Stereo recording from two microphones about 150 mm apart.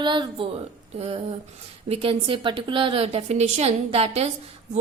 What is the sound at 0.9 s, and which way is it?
A woman's voice, 45° right (ahead or behind).